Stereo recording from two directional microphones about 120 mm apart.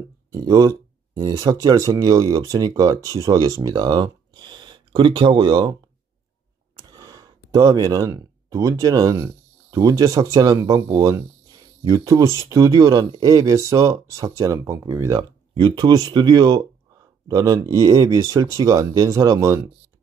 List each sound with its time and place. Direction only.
0.3 s speech: 30° right (ahead or behind)
6.9 s speech: 30° right (ahead or behind)